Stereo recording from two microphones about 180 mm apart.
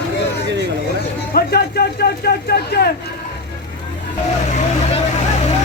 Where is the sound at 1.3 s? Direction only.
60° left (ahead or behind).